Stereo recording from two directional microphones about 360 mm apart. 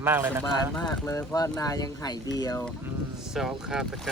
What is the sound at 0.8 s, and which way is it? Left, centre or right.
Speech, centre.